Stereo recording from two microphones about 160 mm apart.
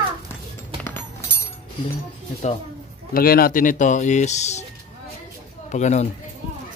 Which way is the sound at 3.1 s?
70° left (ahead or behind).